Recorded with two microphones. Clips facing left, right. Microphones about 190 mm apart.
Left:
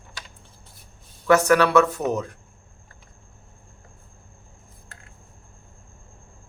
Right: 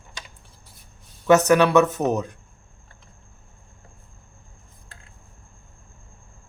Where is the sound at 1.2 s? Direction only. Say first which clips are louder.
Right 1 dB; 20° right (ahead or behind).